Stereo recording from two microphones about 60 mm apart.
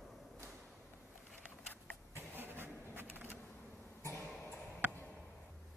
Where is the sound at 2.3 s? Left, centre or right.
Right.